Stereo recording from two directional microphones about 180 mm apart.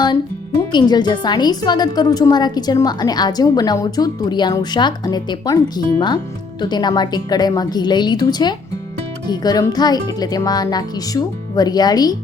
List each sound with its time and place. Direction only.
0.7 s a woman's voice: 25° left (ahead or behind)